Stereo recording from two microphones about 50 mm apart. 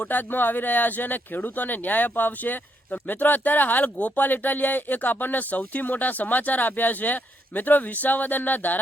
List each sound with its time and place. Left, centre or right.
0.1 s speech: left